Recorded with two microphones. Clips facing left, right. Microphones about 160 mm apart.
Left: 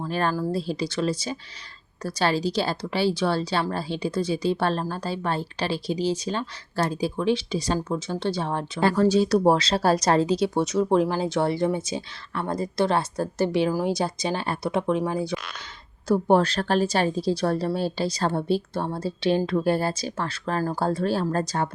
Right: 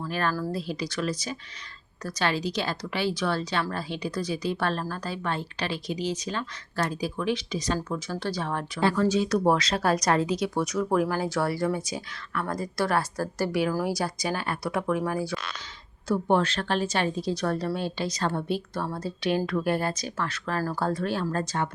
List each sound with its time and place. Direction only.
0.0 s speech: 30° left (ahead or behind)
8.8 s speech: 40° left (ahead or behind); by 15.4 s 20° left (ahead or behind)
16.0 s speech: 40° left (ahead or behind)